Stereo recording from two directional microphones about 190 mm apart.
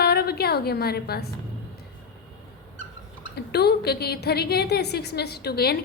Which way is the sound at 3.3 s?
60° left (ahead or behind).